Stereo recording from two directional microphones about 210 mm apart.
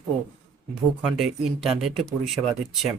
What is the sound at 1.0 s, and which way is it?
Speech, centre (ahead or behind).